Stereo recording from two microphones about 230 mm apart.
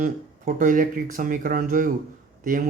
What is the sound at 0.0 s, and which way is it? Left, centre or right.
Speech, right.